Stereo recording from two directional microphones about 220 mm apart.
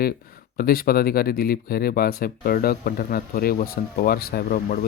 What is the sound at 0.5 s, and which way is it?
Speech, 40° left (ahead or behind).